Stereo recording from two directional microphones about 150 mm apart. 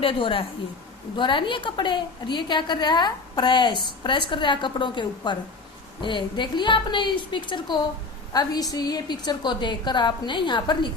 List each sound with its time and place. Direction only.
0.0 s a woman's voice: 35° left (ahead or behind)